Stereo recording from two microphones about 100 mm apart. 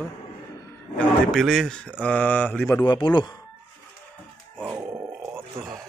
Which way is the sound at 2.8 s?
50° left (ahead or behind).